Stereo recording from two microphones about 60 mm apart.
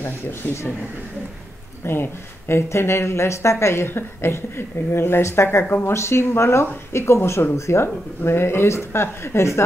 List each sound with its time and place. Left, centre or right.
0.0 s speech: left
1.9 s speech: left